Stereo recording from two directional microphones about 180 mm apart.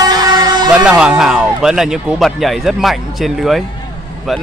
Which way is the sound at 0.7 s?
5° right (ahead or behind).